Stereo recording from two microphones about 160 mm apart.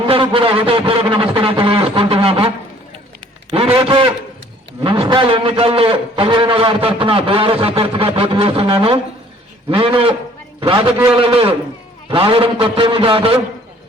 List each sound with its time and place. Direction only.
0.0 s speech: 35° right (ahead or behind)
3.5 s a man's voice: 35° right (ahead or behind)